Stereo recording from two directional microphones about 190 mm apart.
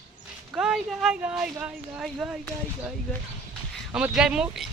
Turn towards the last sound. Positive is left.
turn(degrees=-5)  # may be behind; listen again after turning